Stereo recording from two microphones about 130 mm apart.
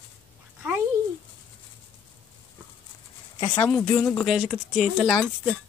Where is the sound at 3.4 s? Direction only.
15° left (ahead or behind); by 5.5 s centre (ahead or behind).